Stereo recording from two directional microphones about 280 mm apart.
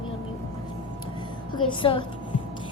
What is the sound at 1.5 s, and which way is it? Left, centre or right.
Speech, centre.